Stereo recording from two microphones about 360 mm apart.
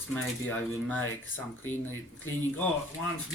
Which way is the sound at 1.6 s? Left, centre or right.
Left.